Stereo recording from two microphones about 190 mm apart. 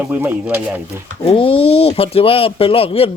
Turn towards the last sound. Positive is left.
turn(degrees=30)  # may be behind; listen again after turning